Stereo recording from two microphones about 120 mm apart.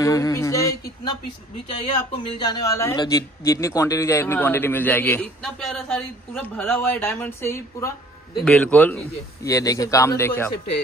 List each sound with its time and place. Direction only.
0.0 s a sound: 25° left (ahead or behind)
1.7 s speech: 50° left (ahead or behind)
2.4 s a man's voice: 30° left (ahead or behind)
5.4 s a man's voice: 5° left (ahead or behind)
6.8 s speech: 15° left (ahead or behind)
9.4 s a man's voice: 25° left (ahead or behind)